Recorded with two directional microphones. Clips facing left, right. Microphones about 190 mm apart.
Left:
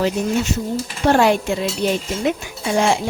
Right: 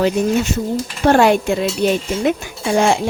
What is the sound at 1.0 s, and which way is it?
Speech, 55° right (ahead or behind).